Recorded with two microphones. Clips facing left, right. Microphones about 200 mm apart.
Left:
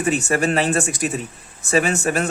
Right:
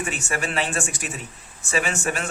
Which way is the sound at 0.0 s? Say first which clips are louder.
Left 9 dB; 40° left (ahead or behind).